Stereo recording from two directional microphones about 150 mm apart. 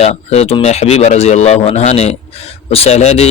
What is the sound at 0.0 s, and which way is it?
Speech, 45° left (ahead or behind).